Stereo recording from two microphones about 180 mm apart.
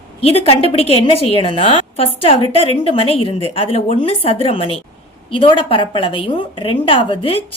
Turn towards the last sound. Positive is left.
turn(degrees=30)  # may be behind; listen again after turning